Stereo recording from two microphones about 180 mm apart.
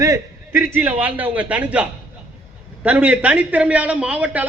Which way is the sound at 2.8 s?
10° right (ahead or behind).